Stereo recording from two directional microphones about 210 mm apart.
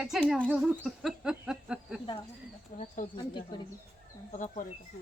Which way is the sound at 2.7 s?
30° left (ahead or behind).